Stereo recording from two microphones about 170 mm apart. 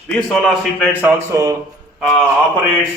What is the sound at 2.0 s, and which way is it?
Speech, centre (ahead or behind).